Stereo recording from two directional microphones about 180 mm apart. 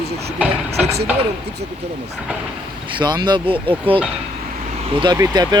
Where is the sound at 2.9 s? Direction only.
25° right (ahead or behind).